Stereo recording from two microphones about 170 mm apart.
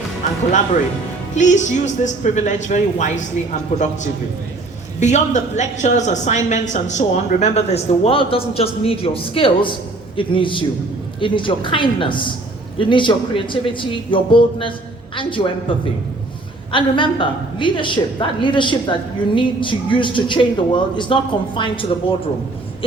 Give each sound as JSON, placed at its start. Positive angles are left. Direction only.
{"t": 1.4, "sound": "a woman's voice", "side_deg": 45}
{"t": 4.9, "sound": "a woman's voice", "side_deg": 45}
{"t": 16.7, "sound": "a woman's voice", "side_deg": 30}